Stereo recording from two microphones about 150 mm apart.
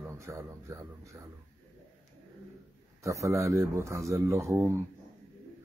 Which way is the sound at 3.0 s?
20° right (ahead or behind).